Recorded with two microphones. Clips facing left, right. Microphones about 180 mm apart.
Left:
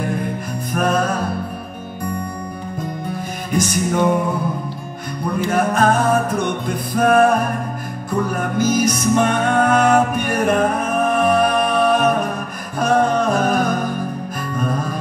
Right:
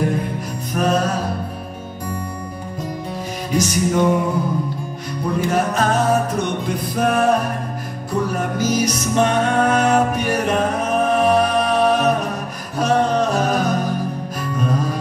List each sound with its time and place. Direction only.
0.7 s music: 55° left (ahead or behind)
3.5 s music: 50° left (ahead or behind)
5.5 s music: 55° left (ahead or behind)